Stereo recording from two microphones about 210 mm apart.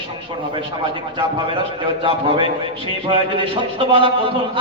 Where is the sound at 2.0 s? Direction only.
25° right (ahead or behind).